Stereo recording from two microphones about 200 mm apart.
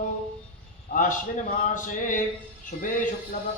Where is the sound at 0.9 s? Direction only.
40° left (ahead or behind).